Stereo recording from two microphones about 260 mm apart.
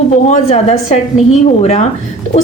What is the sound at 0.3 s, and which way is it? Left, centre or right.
A woman's voice, left.